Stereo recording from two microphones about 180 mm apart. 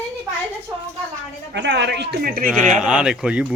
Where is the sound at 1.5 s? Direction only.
75° right (ahead or behind); by 2.5 s 55° right (ahead or behind).